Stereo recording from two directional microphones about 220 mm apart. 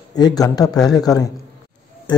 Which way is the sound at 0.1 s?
15° left (ahead or behind).